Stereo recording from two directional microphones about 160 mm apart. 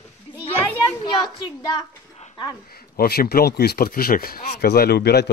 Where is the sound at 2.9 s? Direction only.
70° left (ahead or behind).